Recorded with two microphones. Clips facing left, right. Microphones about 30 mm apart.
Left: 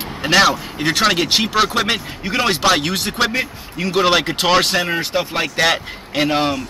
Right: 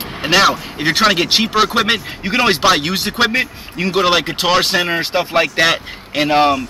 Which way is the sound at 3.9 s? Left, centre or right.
Centre.